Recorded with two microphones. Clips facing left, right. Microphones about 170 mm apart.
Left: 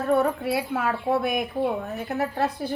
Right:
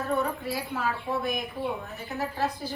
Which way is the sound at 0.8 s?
65° left (ahead or behind).